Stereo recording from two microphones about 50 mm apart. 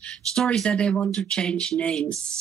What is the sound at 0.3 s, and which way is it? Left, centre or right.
Speech, centre.